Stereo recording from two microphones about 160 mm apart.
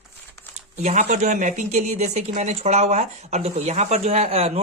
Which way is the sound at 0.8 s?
45° right (ahead or behind).